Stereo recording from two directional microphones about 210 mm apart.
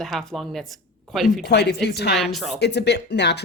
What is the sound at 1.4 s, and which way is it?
Speech, 50° left (ahead or behind).